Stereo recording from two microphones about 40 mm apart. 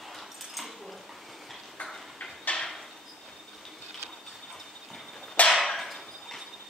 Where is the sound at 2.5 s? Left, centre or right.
Left.